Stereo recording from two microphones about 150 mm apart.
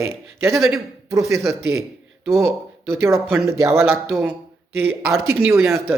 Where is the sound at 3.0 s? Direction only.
20° right (ahead or behind).